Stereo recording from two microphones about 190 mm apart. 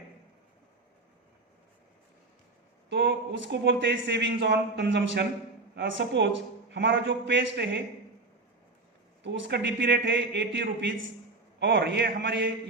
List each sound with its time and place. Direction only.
2.9 s a man's voice: 70° right (ahead or behind)
9.2 s a man's voice: 75° right (ahead or behind)